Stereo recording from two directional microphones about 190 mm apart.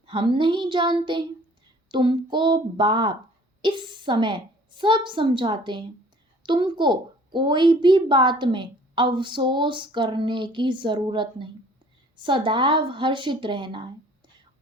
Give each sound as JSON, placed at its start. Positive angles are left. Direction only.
{"t": 0.0, "sound": "a woman's voice", "side_deg": -25}